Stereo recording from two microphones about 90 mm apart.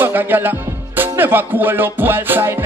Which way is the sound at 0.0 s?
20° right (ahead or behind).